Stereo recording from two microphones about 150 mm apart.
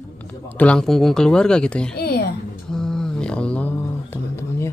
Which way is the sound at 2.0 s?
90° left.